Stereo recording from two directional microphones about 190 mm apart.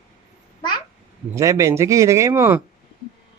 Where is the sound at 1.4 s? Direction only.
15° right (ahead or behind).